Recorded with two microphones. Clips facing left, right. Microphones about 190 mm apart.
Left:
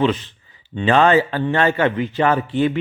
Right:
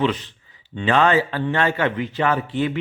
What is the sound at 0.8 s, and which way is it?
Speech, 30° left (ahead or behind).